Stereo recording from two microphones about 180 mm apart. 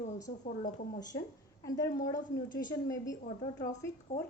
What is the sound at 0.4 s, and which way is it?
Speech, 50° left (ahead or behind).